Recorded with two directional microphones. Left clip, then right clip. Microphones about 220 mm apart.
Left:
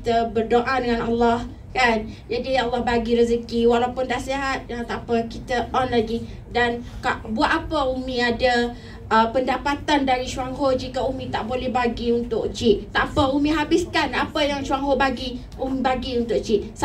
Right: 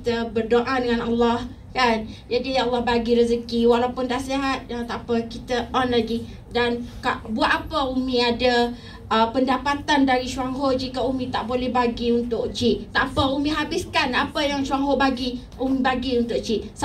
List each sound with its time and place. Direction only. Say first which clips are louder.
0.0 s a woman's voice: left 3 dB; 30° left (ahead or behind)